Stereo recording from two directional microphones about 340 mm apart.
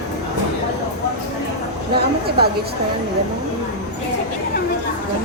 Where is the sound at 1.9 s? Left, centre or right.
Right.